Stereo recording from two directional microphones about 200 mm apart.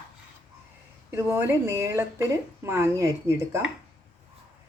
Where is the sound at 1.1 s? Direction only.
10° right (ahead or behind).